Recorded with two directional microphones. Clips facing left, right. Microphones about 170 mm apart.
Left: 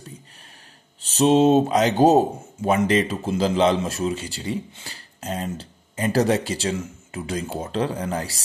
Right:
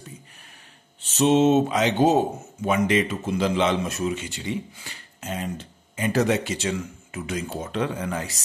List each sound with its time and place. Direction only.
1.0 s speech: 35° left (ahead or behind)